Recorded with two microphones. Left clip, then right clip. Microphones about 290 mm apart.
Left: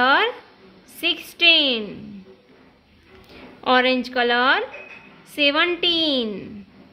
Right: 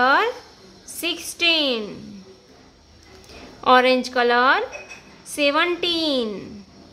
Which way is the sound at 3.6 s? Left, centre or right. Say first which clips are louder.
Right 3 dB; centre.